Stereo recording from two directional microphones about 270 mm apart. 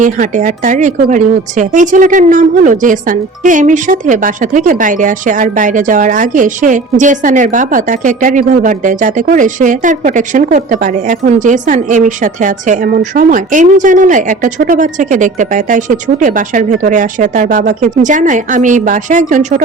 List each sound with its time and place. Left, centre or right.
0.0 s speech: right